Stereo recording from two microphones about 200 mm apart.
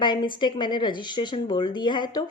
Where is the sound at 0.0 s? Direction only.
25° left (ahead or behind).